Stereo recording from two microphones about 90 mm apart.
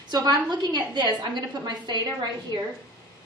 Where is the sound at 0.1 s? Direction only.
50° right (ahead or behind).